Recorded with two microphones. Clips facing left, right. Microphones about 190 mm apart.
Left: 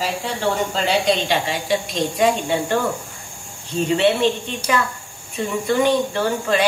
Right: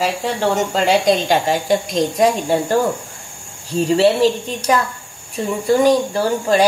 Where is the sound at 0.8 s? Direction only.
45° right (ahead or behind).